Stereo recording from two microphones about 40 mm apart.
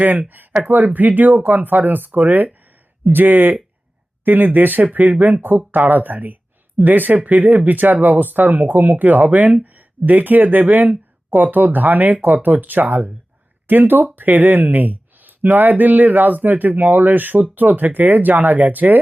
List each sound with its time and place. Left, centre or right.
0.0 s speech: right